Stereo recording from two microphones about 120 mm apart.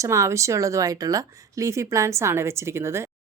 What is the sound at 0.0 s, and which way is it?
A woman's voice, 25° right (ahead or behind).